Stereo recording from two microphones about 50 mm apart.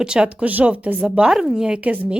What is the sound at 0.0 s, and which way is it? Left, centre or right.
Speech, centre.